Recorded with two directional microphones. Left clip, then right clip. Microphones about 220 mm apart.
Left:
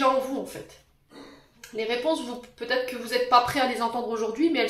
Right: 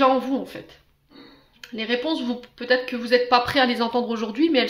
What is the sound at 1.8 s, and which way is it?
Speech, 45° right (ahead or behind).